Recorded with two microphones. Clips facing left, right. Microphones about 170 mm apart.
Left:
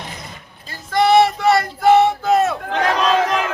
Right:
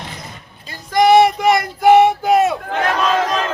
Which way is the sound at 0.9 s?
15° right (ahead or behind).